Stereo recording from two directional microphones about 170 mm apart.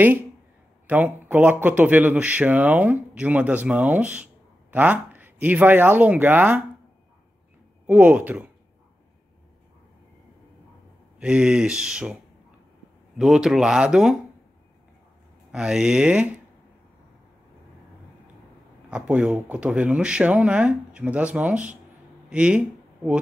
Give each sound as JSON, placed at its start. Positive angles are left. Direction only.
{"t": 0.8, "sound": "speech", "side_deg": -10}
{"t": 7.8, "sound": "speech", "side_deg": -10}
{"t": 11.1, "sound": "speech", "side_deg": -5}
{"t": 13.2, "sound": "speech", "side_deg": -5}
{"t": 15.5, "sound": "speech", "side_deg": -5}
{"t": 18.9, "sound": "speech", "side_deg": -5}